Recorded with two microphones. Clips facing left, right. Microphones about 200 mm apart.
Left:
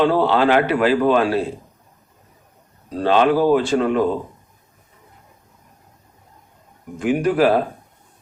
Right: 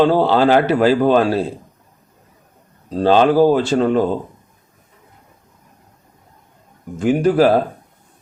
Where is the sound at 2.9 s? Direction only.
35° right (ahead or behind).